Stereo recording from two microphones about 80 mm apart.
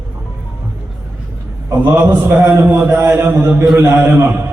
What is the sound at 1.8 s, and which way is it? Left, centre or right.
A man's voice, right.